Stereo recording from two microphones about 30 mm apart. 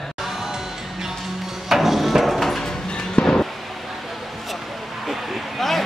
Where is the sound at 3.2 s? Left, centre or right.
Left.